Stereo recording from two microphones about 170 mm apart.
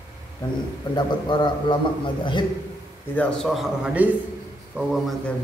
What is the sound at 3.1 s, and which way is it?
A man's voice, 5° left (ahead or behind).